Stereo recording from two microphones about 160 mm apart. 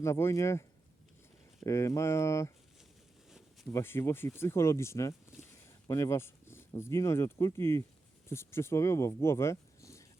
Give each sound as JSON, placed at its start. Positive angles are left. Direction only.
{"t": 0.0, "sound": "speech", "side_deg": 15}
{"t": 1.6, "sound": "speech", "side_deg": 20}
{"t": 3.7, "sound": "speech", "side_deg": 15}